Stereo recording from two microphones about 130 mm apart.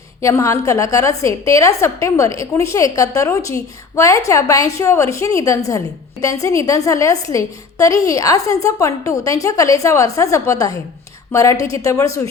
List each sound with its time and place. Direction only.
0.2 s a woman's voice: 25° left (ahead or behind)